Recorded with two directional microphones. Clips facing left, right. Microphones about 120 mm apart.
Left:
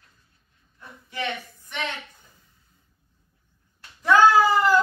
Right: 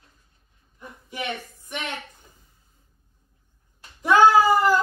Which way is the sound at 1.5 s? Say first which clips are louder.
Left 1 dB; 15° right (ahead or behind).